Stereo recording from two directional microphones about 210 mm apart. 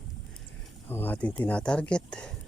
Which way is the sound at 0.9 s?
10° left (ahead or behind).